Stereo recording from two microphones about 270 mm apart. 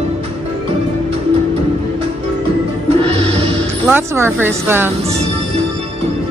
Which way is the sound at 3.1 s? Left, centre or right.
Right.